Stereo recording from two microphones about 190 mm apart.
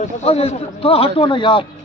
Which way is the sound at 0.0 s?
35° left (ahead or behind).